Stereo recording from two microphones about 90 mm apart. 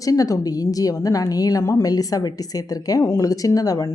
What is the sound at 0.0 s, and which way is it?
A woman's voice, 40° left (ahead or behind).